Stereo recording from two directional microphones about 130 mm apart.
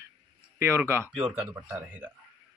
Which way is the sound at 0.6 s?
15° right (ahead or behind).